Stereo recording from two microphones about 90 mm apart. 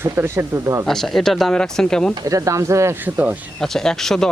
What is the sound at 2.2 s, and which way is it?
Speech, 40° right (ahead or behind).